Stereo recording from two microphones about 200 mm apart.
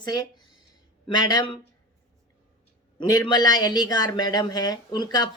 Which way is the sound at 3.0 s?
20° left (ahead or behind).